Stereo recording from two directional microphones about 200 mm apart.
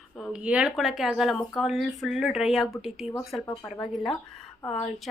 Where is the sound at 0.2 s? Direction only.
5° right (ahead or behind).